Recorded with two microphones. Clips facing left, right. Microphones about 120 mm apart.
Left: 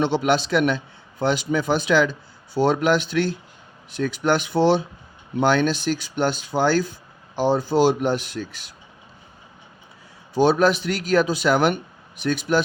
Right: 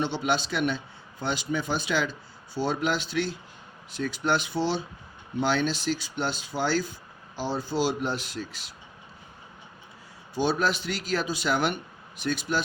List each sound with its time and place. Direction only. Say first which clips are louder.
0.0 s speech: left 7 dB; 75° left (ahead or behind)
1.2 s speech: left 8 dB; 85° left
2.6 s speech: left 8 dB; 70° left (ahead or behind)
10.3 s speech: left 8 dB; 70° left (ahead or behind)